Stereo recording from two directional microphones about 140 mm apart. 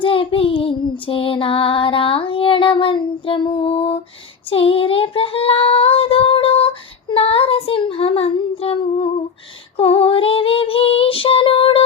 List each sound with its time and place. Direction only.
0.0 s child singing: 40° left (ahead or behind)
4.4 s female singing: 40° left (ahead or behind)
7.1 s child singing: 45° left (ahead or behind)